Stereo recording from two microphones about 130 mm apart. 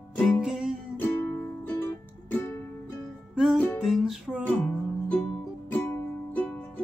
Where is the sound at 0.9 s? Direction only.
15° left (ahead or behind).